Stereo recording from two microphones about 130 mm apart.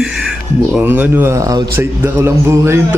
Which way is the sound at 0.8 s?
15° right (ahead or behind).